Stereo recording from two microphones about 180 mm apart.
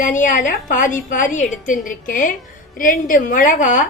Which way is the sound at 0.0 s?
45° left (ahead or behind).